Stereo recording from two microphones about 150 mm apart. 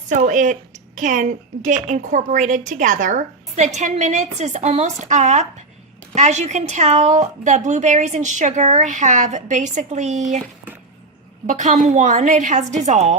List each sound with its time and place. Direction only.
0.3 s a woman's voice: 55° right (ahead or behind)
11.4 s a woman's voice: 55° right (ahead or behind)